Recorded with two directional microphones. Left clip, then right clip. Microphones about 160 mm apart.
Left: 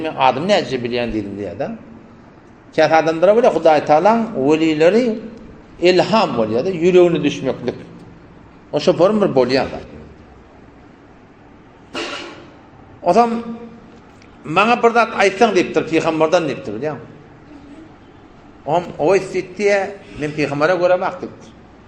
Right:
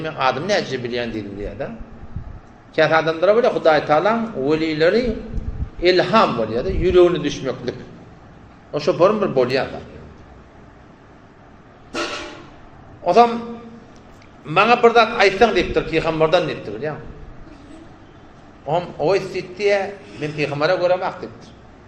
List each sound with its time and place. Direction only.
0.0 s a man's voice: 40° left (ahead or behind)
2.7 s a man's voice: 50° left (ahead or behind)
8.7 s a man's voice: 55° left (ahead or behind)
13.1 s a man's voice: 60° left (ahead or behind)
14.4 s a man's voice: 55° left (ahead or behind)
18.6 s a man's voice: 55° left (ahead or behind); by 19.8 s 70° left (ahead or behind)
20.4 s a man's voice: 50° left (ahead or behind)